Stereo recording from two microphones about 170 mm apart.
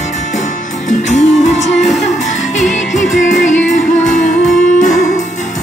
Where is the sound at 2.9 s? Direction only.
Centre (ahead or behind).